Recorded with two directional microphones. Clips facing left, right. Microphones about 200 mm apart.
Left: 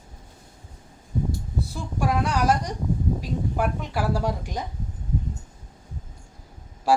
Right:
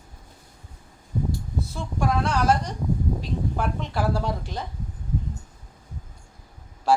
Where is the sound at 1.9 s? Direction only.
15° left (ahead or behind).